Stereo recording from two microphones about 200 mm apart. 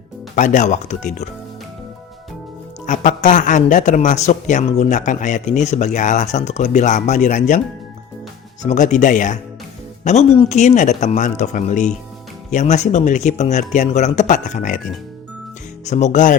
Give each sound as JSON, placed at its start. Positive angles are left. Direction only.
{"t": 0.3, "sound": "speech", "side_deg": 40}
{"t": 2.8, "sound": "speech", "side_deg": 40}
{"t": 8.6, "sound": "speech", "side_deg": 35}
{"t": 15.8, "sound": "speech", "side_deg": 35}